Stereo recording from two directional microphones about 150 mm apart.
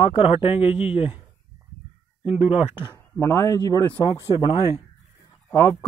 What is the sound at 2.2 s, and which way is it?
Speech, 40° left (ahead or behind).